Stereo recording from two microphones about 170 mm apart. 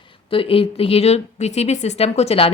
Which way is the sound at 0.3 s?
30° left (ahead or behind).